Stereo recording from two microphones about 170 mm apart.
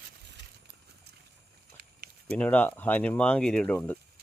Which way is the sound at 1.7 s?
70° right (ahead or behind).